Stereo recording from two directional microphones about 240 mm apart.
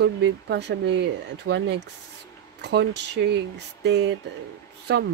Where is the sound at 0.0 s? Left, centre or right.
Right.